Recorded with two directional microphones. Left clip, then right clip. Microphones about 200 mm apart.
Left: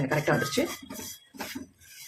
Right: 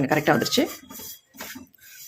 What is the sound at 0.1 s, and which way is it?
Speech, 40° right (ahead or behind).